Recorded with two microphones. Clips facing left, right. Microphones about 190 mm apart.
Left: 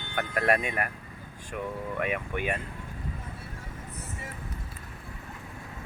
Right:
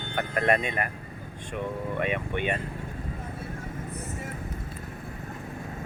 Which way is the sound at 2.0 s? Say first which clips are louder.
Right 2 dB; 5° left (ahead or behind).